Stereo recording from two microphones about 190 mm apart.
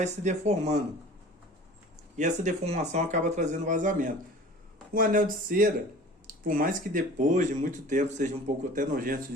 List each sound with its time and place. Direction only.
0.0 s speech: 40° right (ahead or behind)
2.1 s speech: 40° right (ahead or behind)